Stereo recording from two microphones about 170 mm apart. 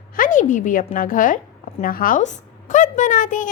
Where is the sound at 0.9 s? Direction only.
55° left (ahead or behind).